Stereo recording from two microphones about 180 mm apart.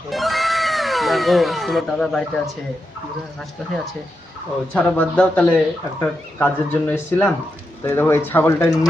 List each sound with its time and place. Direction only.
0.1 s cat: centre (ahead or behind)
4.7 s speech: 10° left (ahead or behind)